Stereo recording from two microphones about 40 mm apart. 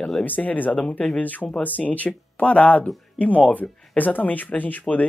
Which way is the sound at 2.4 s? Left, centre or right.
Left.